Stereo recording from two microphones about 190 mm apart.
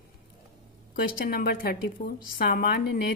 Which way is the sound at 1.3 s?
50° left (ahead or behind).